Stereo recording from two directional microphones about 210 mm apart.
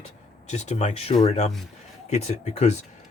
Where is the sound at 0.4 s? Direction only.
30° left (ahead or behind).